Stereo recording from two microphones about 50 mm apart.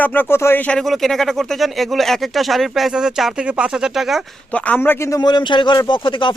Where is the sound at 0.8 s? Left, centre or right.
Centre.